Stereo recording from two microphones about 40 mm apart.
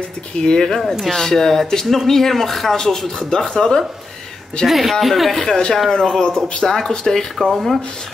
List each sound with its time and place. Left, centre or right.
0.4 s speech: centre
4.6 s speech: centre
5.4 s speech: centre